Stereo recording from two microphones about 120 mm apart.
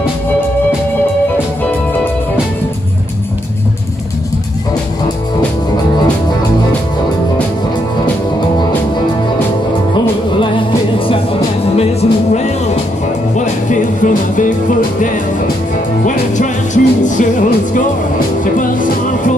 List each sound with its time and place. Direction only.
11.7 s music: 60° left (ahead or behind)
13.4 s music: 90° left
16.0 s music: 90° left